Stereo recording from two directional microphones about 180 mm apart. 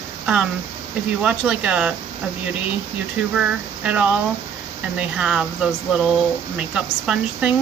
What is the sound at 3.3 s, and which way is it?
Speech, 5° right (ahead or behind).